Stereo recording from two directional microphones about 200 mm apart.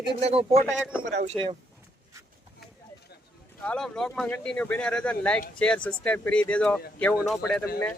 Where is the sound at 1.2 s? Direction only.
30° right (ahead or behind).